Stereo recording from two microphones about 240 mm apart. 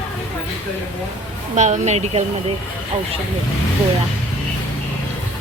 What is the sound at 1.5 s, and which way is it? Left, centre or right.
Speech, right.